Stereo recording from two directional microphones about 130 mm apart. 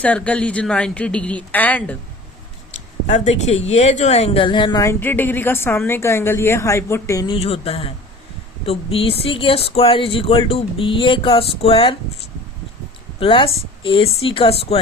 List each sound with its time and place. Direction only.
0.0 s a woman's voice: 10° left (ahead or behind)
3.1 s speech: 60° left (ahead or behind)
4.4 s music: 40° left (ahead or behind)
4.8 s a woman's voice: 20° left (ahead or behind)
7.3 s speech: 50° left (ahead or behind)
13.1 s speech: 40° left (ahead or behind)